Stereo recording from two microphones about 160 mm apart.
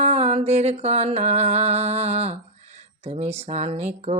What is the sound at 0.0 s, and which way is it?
Music, 40° right (ahead or behind).